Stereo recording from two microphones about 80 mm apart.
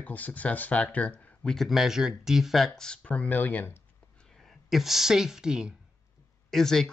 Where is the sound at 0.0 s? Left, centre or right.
Centre.